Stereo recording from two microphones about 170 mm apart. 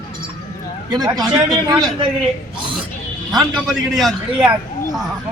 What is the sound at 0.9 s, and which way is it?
A man's voice, 25° right (ahead or behind).